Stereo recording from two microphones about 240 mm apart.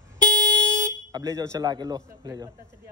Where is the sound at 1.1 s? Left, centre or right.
Centre.